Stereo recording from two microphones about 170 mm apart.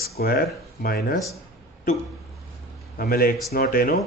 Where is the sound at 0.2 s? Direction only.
60° left (ahead or behind).